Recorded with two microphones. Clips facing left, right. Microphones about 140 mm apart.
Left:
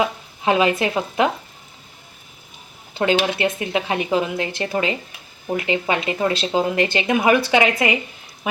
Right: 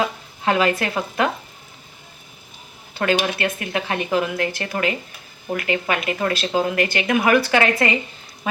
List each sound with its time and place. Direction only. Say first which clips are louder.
0.0 s speech: left 1 dB; 20° left (ahead or behind)
3.3 s speech: left 3 dB; 20° left (ahead or behind)